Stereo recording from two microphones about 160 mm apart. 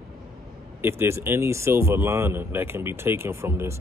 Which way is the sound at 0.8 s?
15° right (ahead or behind).